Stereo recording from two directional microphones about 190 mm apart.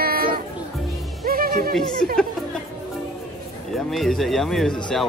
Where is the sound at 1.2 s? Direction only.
50° right (ahead or behind).